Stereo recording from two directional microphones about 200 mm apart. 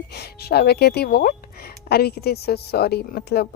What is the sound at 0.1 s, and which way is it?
Speech, 55° left (ahead or behind).